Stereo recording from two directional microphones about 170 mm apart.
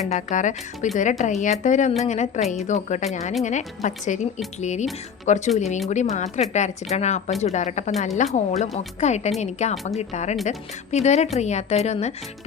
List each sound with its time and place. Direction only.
0.0 s a woman's voice: 45° left (ahead or behind)